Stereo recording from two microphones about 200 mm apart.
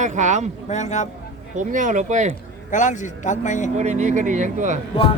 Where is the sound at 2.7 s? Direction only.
40° left (ahead or behind).